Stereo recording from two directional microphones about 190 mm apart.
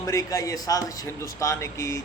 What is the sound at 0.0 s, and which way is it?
A man's voice, 15° left (ahead or behind).